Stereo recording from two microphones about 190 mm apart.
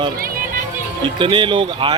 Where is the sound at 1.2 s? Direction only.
25° right (ahead or behind).